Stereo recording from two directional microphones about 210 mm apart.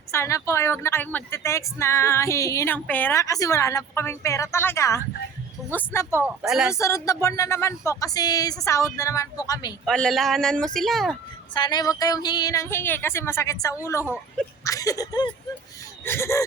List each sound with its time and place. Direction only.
0.1 s speech: 15° left (ahead or behind)
6.2 s speech: 5° right (ahead or behind)
6.7 s speech: 15° left (ahead or behind)
9.8 s speech: centre (ahead or behind)
11.5 s speech: 20° left (ahead or behind)